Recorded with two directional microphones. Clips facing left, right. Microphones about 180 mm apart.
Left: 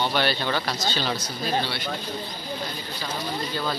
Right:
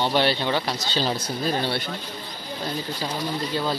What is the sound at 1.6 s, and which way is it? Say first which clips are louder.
Speech: right 4 dB; 50° right (ahead or behind).